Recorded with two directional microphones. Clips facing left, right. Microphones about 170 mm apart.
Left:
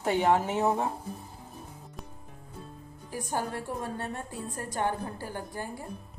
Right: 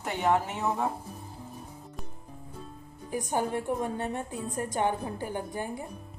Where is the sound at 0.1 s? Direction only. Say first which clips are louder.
Left 2 dB; 30° left (ahead or behind).